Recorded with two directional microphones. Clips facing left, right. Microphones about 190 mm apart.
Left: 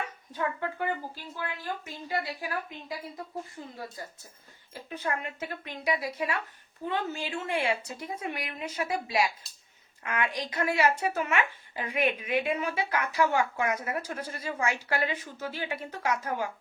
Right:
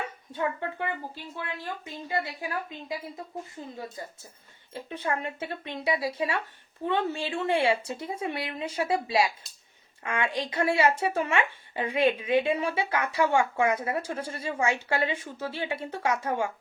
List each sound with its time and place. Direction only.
0.3 s speech: 25° right (ahead or behind)
1.8 s speech: 20° right (ahead or behind)